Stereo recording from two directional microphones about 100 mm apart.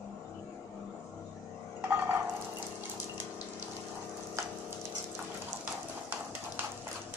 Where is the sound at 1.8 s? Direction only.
20° right (ahead or behind).